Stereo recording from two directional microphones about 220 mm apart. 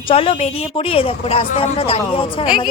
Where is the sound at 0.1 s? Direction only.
25° left (ahead or behind).